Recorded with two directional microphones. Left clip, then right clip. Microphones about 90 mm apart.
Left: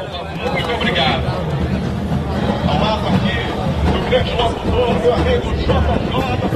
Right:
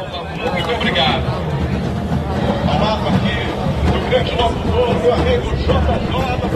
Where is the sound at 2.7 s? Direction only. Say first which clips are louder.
Left 1 dB; 35° right (ahead or behind).